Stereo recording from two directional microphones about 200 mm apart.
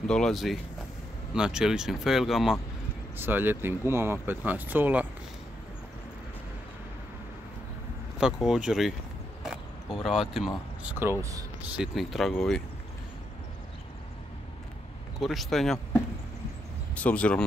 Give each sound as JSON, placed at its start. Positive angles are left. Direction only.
{"t": 0.0, "sound": "speech", "side_deg": 5}
{"t": 8.2, "sound": "speech", "side_deg": -5}
{"t": 9.4, "sound": "a sound", "side_deg": 0}
{"t": 10.3, "sound": "speech", "side_deg": -5}
{"t": 11.7, "sound": "speech", "side_deg": 0}
{"t": 15.1, "sound": "speech", "side_deg": 0}